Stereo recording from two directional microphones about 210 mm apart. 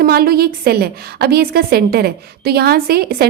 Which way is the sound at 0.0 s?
45° right (ahead or behind).